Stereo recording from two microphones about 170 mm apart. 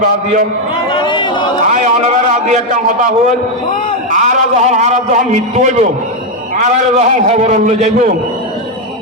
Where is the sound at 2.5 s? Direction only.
45° right (ahead or behind).